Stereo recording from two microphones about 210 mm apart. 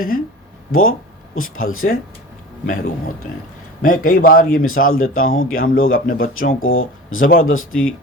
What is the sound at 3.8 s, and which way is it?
A man's voice, 40° left (ahead or behind).